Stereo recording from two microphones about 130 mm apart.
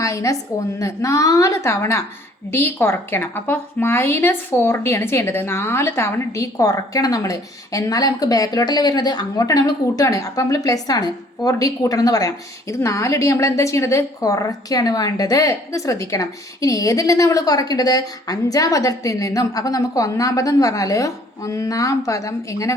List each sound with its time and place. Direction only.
0.0 s a woman's voice: 25° left (ahead or behind)